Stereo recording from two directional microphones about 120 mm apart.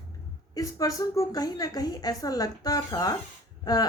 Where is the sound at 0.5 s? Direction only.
30° left (ahead or behind).